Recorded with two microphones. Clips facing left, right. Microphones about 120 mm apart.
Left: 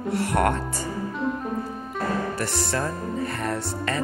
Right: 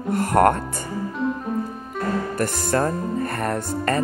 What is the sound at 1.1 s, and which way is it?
Music, centre (ahead or behind).